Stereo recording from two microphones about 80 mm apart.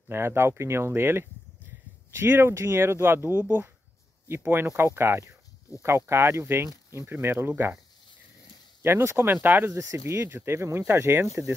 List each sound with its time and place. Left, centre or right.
0.1 s speech: right
8.8 s speech: right
9.7 s speech: right